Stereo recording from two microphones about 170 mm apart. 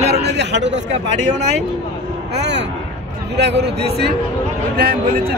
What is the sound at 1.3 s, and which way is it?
Speech, 45° right (ahead or behind).